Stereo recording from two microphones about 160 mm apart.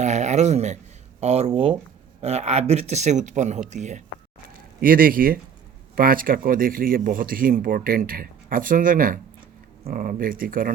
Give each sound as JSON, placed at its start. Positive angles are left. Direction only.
{"t": 0.0, "sound": "dog", "side_deg": -45}
{"t": 1.2, "sound": "speech", "side_deg": -40}
{"t": 4.8, "sound": "speech", "side_deg": -60}